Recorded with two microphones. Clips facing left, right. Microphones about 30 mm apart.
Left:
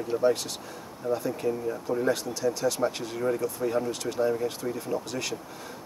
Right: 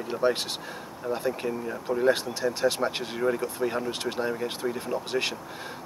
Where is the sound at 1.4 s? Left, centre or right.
Right.